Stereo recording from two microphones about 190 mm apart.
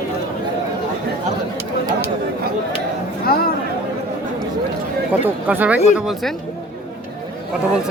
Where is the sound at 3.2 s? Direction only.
55° left (ahead or behind).